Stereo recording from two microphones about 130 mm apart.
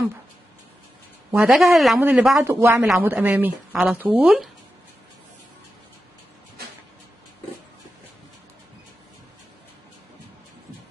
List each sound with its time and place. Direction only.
1.3 s speech: 15° right (ahead or behind)
1.6 s speech: centre (ahead or behind)
2.0 s speech: 15° right (ahead or behind)